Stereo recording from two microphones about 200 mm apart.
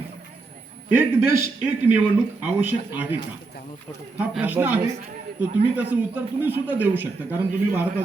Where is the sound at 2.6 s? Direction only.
10° right (ahead or behind).